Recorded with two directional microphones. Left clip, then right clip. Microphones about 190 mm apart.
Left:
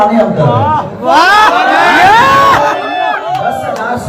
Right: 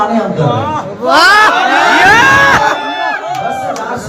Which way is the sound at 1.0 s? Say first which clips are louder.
Even; 25° right (ahead or behind).